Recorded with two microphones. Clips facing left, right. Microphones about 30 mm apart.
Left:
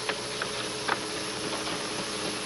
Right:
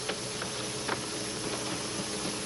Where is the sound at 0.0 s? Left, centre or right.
Left.